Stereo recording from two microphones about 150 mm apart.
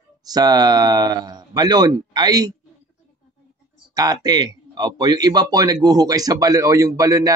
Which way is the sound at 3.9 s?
25° right (ahead or behind).